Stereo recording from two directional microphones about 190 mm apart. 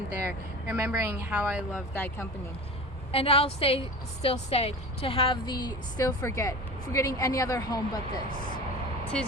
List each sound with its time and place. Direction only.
0.3 s speech: 10° right (ahead or behind)
3.1 s a woman's voice: 30° left (ahead or behind)